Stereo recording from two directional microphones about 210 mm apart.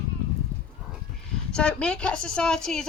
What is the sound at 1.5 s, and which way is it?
A woman's voice, 5° left (ahead or behind).